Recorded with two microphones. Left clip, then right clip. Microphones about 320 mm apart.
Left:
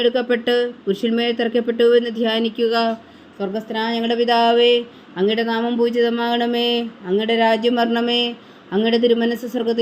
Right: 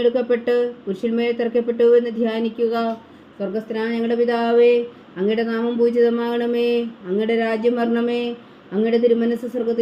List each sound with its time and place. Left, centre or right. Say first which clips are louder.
0.0 s speech: even; left
8.0 s speech: left 3 dB; left
8.7 s speech: left 1 dB; left